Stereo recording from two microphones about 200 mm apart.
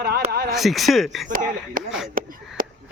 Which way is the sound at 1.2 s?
40° right (ahead or behind).